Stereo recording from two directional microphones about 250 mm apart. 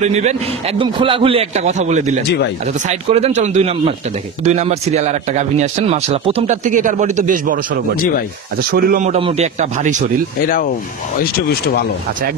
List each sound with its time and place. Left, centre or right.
0.0 s a man's voice: right
2.2 s speech: left
2.6 s a man's voice: right
10.4 s speech: left